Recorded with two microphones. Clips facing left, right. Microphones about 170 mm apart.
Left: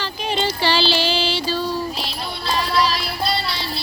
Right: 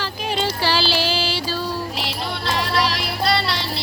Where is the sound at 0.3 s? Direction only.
5° right (ahead or behind).